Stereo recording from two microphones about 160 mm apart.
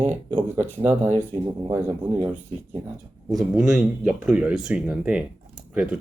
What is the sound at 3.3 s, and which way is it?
Speech, 5° right (ahead or behind).